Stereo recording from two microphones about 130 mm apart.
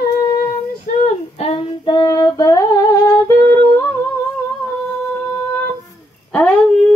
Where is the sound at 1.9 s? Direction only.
35° left (ahead or behind).